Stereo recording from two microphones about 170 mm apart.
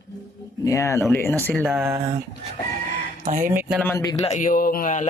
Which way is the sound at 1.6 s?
10° right (ahead or behind).